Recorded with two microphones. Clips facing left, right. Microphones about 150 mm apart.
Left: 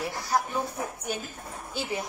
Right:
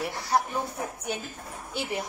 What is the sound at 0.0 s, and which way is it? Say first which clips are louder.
Speech: right 1 dB; 25° right (ahead or behind).